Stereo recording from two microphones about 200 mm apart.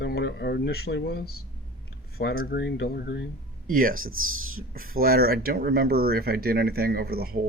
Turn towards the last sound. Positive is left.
turn(degrees=-50)  # may be behind; listen again after turning